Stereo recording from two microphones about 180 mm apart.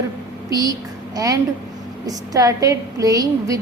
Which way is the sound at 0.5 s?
20° right (ahead or behind).